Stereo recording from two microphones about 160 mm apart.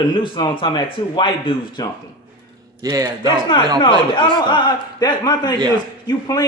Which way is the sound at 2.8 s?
20° right (ahead or behind).